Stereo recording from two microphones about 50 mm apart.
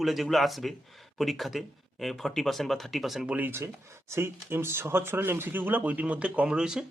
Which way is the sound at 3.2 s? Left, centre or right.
Right.